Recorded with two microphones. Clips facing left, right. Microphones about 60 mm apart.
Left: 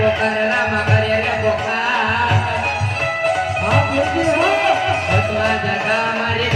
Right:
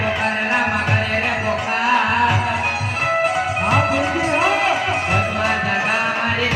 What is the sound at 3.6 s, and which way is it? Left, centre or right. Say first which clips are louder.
Music: left 1 dB; centre.